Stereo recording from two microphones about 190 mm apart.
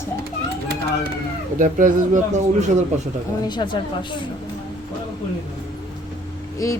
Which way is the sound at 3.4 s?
25° left (ahead or behind).